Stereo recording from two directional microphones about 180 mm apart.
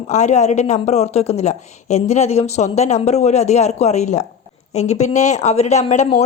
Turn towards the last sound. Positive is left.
turn(degrees=40)  # may be behind; listen again after turning